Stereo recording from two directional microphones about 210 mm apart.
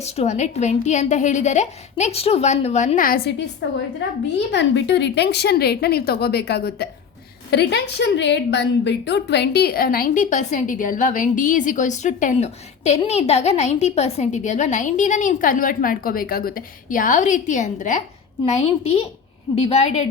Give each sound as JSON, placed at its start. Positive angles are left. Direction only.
{"t": 0.0, "sound": "a woman's voice", "side_deg": 30}
{"t": 3.6, "sound": "a woman's voice", "side_deg": 55}